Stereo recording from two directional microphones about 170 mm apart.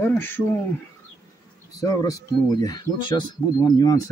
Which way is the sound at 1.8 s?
20° left (ahead or behind).